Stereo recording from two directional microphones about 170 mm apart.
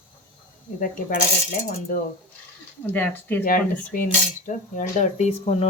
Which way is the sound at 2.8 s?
10° left (ahead or behind).